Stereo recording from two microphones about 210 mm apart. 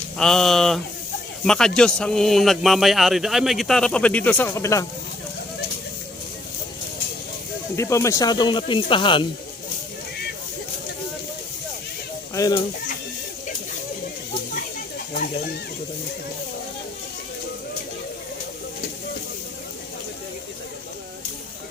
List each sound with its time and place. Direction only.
0.2 s speech: centre (ahead or behind)
7.8 s speech: 15° left (ahead or behind)
12.3 s speech: 15° left (ahead or behind)